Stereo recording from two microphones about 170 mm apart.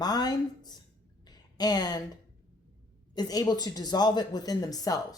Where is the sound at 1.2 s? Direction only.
25° left (ahead or behind).